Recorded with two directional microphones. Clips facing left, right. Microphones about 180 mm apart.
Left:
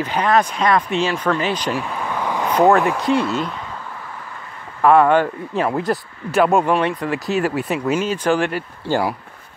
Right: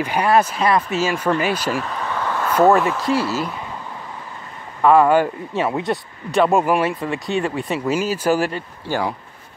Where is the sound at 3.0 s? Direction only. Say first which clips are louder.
Left 2 dB; 5° right (ahead or behind).